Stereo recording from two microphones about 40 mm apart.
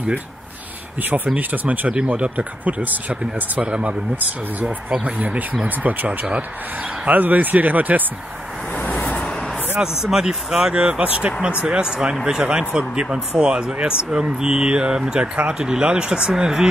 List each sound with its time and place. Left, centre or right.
1.0 s speech: right
2.0 s speech: right
2.6 s speech: right
5.0 s speech: right
8.9 s vehicle: left
10.0 s speech: centre